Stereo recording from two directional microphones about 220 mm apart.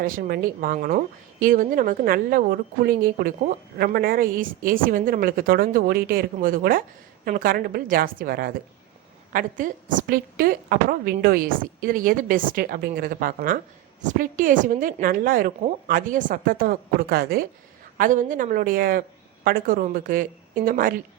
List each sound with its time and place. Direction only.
0.0 s speech: 40° right (ahead or behind)